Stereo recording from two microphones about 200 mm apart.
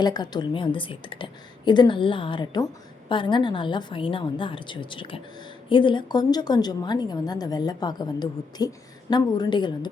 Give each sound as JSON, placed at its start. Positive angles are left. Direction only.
{"t": 0.0, "sound": "a woman's voice", "side_deg": 20}